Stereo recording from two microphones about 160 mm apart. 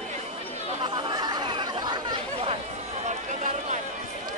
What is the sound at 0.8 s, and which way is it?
Chatter, 30° right (ahead or behind).